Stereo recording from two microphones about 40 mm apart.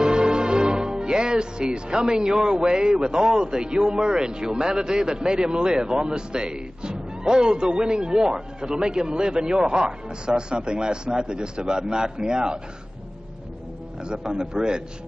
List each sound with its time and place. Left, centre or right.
0.0 s music: centre
1.9 s a man's voice: right
14.0 s a man's voice: right